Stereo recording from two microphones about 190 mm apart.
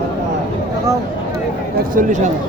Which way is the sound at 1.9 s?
45° right (ahead or behind).